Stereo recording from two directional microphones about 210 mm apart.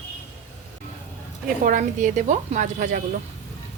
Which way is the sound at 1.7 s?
40° right (ahead or behind).